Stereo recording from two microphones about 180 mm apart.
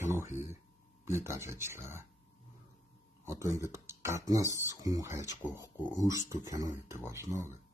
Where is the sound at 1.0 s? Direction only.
15° right (ahead or behind).